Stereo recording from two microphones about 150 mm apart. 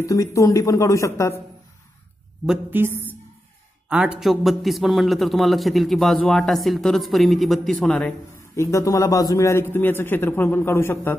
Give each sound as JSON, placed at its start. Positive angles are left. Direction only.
{"t": 0.0, "sound": "speech", "side_deg": 20}
{"t": 2.4, "sound": "a man's voice", "side_deg": -5}
{"t": 2.8, "sound": "a woman's voice", "side_deg": -15}
{"t": 8.4, "sound": "a man's voice", "side_deg": 20}